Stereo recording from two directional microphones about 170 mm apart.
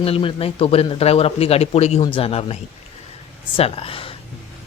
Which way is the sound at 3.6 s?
35° left (ahead or behind).